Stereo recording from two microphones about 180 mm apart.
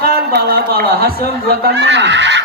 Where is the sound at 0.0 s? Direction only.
60° right (ahead or behind).